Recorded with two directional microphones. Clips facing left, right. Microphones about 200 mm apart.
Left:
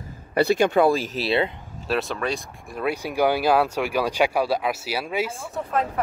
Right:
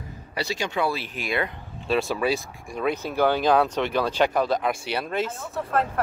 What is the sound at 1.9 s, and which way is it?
Speech, centre (ahead or behind).